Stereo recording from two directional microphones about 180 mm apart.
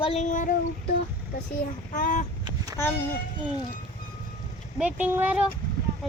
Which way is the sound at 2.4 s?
20° right (ahead or behind).